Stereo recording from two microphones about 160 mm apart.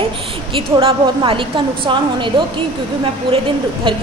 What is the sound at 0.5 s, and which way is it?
A woman's voice, 35° right (ahead or behind).